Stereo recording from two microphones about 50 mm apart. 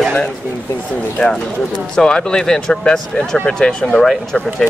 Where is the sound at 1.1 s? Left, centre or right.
Centre.